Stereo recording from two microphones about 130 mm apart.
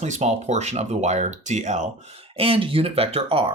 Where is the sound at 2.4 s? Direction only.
45° right (ahead or behind).